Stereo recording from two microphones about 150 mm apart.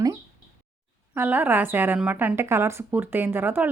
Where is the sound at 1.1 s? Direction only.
15° right (ahead or behind).